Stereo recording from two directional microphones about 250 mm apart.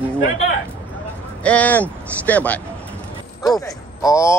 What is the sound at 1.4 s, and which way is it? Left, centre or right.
Speech, centre.